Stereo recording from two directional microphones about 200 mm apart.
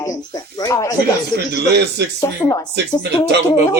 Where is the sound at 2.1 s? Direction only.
15° left (ahead or behind).